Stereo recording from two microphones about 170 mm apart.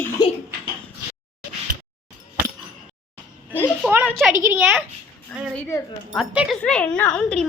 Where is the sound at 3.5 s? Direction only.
10° left (ahead or behind).